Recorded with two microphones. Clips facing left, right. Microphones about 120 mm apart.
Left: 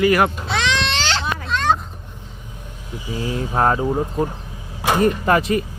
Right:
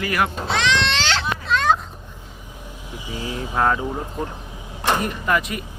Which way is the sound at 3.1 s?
35° left (ahead or behind).